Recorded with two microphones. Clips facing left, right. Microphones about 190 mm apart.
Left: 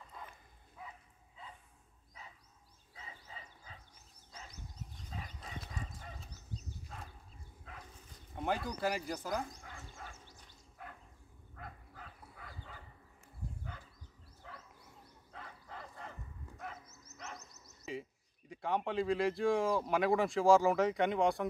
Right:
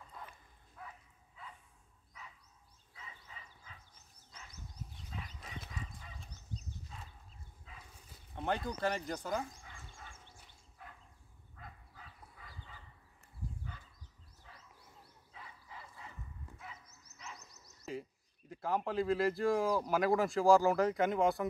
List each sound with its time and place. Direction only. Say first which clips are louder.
0.8 s livestock: even; 15° left (ahead or behind)
2.9 s bow-wow: left 2 dB; 35° left (ahead or behind)
5.1 s clip-clop: left 2 dB; 35° left (ahead or behind)
6.9 s a sound: left 4 dB; 55° left (ahead or behind)
7.7 s dog: left 5 dB; 55° left (ahead or behind)
8.4 s speech: even; 5° left (ahead or behind)
9.6 s fowl: left 4 dB; 55° left (ahead or behind)
10.1 s a sound: left 1 dB; 40° left (ahead or behind)
11.5 s dog: left 4 dB; 55° left (ahead or behind)
13.7 s a sound: left 3 dB; 55° left (ahead or behind)
14.4 s wild animals: left 7 dB; 60° left (ahead or behind)
15.3 s bow-wow: left 4 dB; 55° left (ahead or behind)
17.9 s bird: even; centre (ahead or behind)
18.5 s speech: even; centre (ahead or behind)